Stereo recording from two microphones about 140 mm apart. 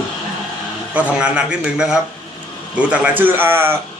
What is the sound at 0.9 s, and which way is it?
A man's voice, 10° right (ahead or behind).